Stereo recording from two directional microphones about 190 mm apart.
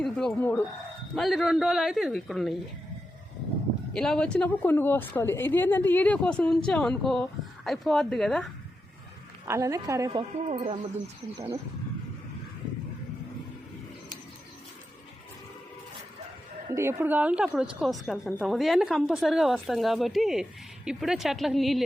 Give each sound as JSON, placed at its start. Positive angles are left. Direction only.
{"t": 0.0, "sound": "a woman's voice", "side_deg": 5}
{"t": 3.9, "sound": "a woman's voice", "side_deg": 5}
{"t": 9.5, "sound": "a woman's voice", "side_deg": -15}
{"t": 10.1, "sound": "speech", "side_deg": -30}
{"t": 16.7, "sound": "a woman's voice", "side_deg": -10}